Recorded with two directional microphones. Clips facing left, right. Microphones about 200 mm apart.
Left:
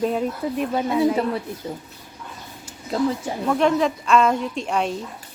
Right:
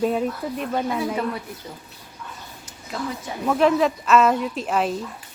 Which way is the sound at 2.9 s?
30° left (ahead or behind).